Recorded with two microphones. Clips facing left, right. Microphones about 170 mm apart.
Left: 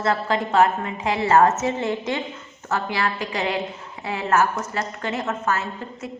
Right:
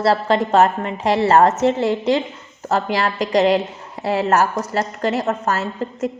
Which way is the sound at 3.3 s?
40° right (ahead or behind).